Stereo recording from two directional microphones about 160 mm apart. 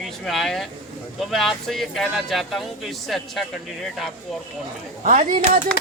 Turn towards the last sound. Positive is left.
turn(degrees=-55)  # may be behind; listen again after turning